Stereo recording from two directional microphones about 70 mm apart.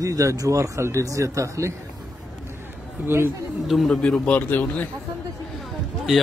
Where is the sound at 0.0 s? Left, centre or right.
Right.